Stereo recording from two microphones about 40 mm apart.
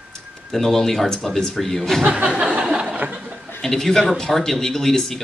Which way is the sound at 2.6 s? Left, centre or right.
Centre.